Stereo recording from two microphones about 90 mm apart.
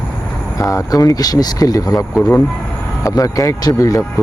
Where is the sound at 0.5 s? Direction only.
40° left (ahead or behind).